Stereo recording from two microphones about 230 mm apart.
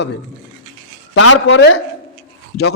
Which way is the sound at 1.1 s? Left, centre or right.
Left.